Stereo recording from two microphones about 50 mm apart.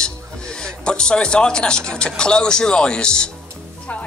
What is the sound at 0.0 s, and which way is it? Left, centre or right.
Speech, centre.